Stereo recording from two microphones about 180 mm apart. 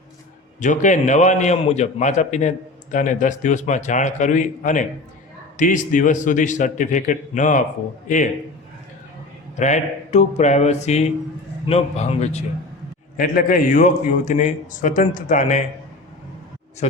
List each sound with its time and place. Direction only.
0.6 s a man's voice: 45° left (ahead or behind)
9.6 s speech: 40° left (ahead or behind)
13.1 s a man's voice: 50° left (ahead or behind)
16.8 s speech: 35° left (ahead or behind)